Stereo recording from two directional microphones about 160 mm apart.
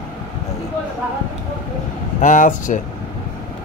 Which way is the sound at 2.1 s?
50° left (ahead or behind).